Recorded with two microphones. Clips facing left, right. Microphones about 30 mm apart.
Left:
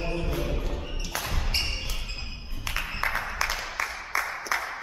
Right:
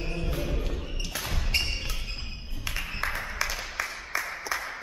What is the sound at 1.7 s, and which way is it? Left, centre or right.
Music, centre.